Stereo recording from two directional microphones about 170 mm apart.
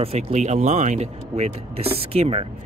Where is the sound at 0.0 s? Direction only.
40° right (ahead or behind).